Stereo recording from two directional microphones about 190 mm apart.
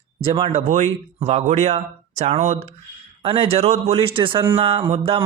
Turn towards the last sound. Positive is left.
turn(degrees=-30)  # may be behind; listen again after turning